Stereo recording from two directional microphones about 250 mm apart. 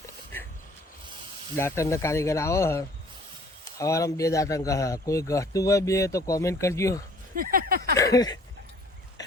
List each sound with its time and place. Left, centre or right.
1.5 s speech: centre
7.3 s a sound: right
7.9 s speech: centre